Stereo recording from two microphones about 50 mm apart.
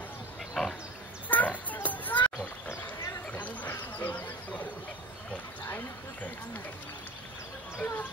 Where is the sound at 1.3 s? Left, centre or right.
Left.